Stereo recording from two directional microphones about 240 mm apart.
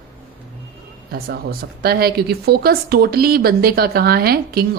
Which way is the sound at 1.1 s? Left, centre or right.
Right.